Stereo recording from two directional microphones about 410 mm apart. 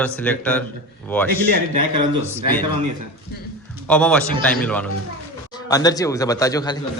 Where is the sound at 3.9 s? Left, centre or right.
Centre.